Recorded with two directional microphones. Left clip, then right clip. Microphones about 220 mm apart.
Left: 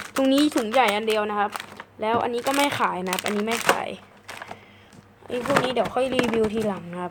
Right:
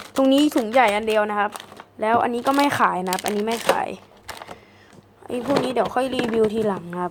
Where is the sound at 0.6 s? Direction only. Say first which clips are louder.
Right 3 dB; 10° right (ahead or behind).